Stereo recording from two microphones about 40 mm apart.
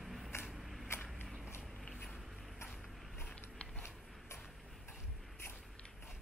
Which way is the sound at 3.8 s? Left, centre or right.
Left.